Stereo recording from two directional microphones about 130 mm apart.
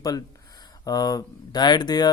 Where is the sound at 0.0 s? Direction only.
30° left (ahead or behind).